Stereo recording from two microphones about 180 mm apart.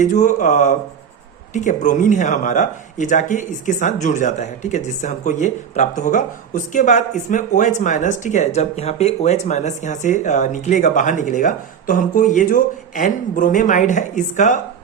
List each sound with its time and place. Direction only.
0.0 s speech: 45° left (ahead or behind)